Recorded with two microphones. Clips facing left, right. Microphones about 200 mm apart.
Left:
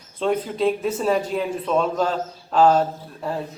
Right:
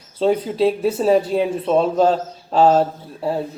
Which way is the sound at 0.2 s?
35° right (ahead or behind).